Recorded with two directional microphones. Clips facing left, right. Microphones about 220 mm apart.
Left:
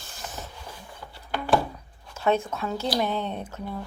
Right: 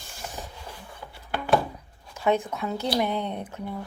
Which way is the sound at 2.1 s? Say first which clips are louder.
Even; 15° right (ahead or behind).